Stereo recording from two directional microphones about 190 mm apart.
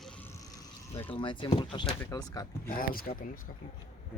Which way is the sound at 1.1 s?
25° left (ahead or behind).